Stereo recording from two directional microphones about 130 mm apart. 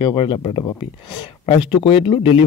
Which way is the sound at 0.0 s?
40° left (ahead or behind).